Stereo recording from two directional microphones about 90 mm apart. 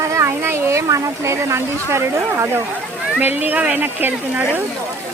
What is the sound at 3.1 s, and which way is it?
Speech, 20° right (ahead or behind).